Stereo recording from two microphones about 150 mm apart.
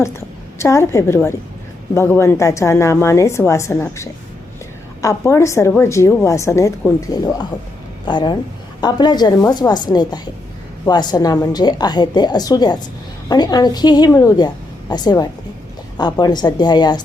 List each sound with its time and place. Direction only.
0.6 s a woman's voice: 20° left (ahead or behind)